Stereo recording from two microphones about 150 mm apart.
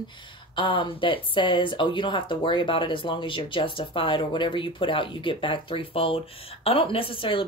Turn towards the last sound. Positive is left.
turn(degrees=35)  # may be behind; listen again after turning